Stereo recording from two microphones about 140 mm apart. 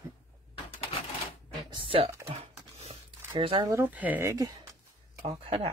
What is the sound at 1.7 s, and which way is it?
Computer keyboard, 40° right (ahead or behind).